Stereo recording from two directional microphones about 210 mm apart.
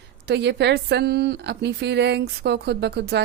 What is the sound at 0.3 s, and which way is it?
Speech, 55° right (ahead or behind).